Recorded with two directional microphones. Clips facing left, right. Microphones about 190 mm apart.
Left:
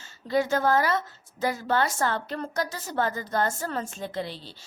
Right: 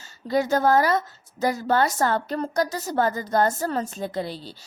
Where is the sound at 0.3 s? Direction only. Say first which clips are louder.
Right 3 dB; 40° right (ahead or behind).